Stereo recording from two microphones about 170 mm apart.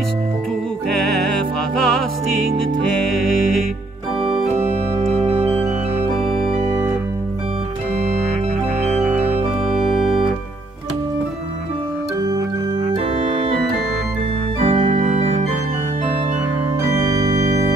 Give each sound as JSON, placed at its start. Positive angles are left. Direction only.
{"t": 1.8, "sound": "music", "side_deg": 0}
{"t": 3.1, "sound": "music", "side_deg": 0}
{"t": 4.2, "sound": "organ", "side_deg": -40}
{"t": 14.9, "sound": "organ", "side_deg": -50}